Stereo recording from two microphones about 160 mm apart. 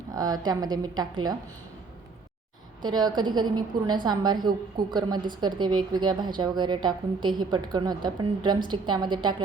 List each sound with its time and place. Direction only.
0.1 s a woman's voice: 25° right (ahead or behind)
2.8 s a woman's voice: 25° right (ahead or behind)